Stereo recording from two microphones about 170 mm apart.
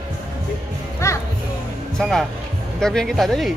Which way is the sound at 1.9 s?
5° left (ahead or behind).